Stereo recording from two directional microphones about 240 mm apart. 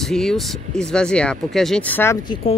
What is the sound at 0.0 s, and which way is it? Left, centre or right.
Speech, centre.